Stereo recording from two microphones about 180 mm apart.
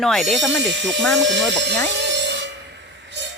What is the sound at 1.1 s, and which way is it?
Speech, 90° right.